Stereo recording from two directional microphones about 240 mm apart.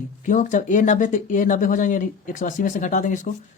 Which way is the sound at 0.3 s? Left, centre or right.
Left.